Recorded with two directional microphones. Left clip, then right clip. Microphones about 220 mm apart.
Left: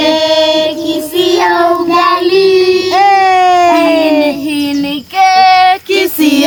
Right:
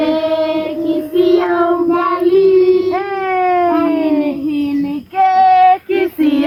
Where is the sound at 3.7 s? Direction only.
35° left (ahead or behind).